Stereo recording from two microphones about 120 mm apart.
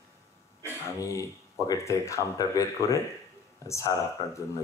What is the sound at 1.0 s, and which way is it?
A man's voice, 30° left (ahead or behind).